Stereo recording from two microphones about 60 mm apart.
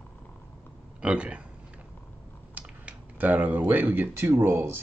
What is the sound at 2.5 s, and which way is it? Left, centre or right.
Speech, right.